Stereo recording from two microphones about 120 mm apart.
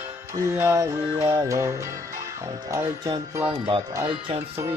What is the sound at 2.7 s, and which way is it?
Speech, 35° right (ahead or behind).